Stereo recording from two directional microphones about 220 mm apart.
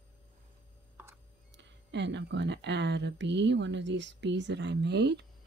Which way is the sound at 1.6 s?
55° right (ahead or behind).